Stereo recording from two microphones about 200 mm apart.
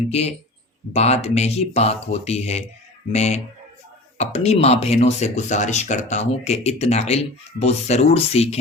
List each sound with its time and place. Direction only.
0.1 s speech: 30° left (ahead or behind)